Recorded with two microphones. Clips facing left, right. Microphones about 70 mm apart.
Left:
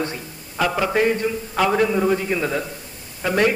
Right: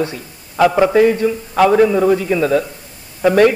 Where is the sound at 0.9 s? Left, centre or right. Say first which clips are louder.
Right 7 dB; centre.